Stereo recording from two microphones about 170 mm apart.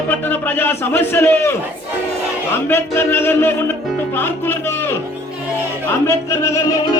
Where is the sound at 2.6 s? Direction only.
15° left (ahead or behind).